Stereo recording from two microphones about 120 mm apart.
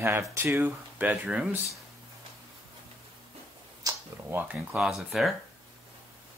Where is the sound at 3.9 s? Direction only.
30° right (ahead or behind).